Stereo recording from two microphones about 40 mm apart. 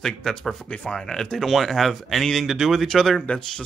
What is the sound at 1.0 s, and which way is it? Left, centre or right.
Speech, centre.